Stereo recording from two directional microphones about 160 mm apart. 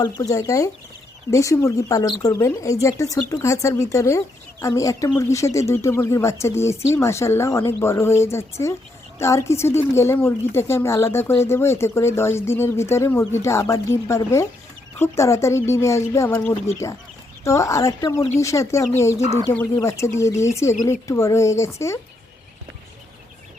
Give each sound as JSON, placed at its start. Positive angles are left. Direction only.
{"t": 0.0, "sound": "a woman's voice", "side_deg": 20}